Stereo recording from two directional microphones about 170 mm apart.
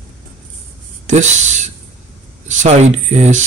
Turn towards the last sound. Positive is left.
turn(degrees=-45)  # may be behind; listen again after turning